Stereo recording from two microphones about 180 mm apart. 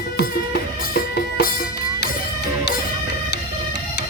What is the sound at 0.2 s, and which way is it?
Music, 60° left (ahead or behind).